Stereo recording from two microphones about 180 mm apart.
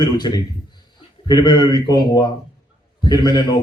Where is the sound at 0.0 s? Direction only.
25° left (ahead or behind).